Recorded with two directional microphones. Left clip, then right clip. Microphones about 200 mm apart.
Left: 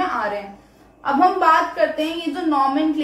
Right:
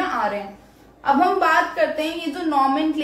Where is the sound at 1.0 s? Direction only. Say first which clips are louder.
Left 2 dB; 15° left (ahead or behind).